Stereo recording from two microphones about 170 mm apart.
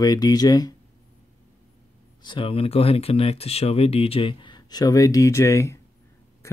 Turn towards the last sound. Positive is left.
turn(degrees=20)  # may be behind; listen again after turning